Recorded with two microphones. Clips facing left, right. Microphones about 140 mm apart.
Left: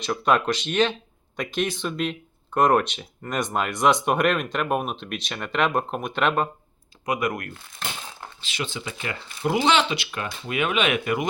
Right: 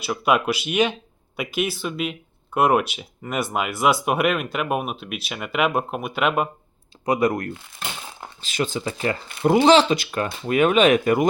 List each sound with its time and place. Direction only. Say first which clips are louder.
0.0 s speech: right 1 dB; 10° right (ahead or behind)
7.0 s speech: right 5 dB; 30° right (ahead or behind)
8.4 s speech: right 7 dB; 45° right (ahead or behind)
9.4 s speech: right 6 dB; 55° right (ahead or behind)
9.6 s speech: right 7 dB; 40° right (ahead or behind)